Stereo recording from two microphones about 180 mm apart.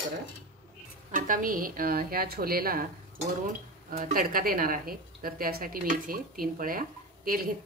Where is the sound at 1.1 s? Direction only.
50° right (ahead or behind).